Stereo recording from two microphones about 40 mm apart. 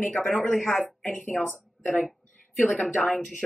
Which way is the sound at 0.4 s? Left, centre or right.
Centre.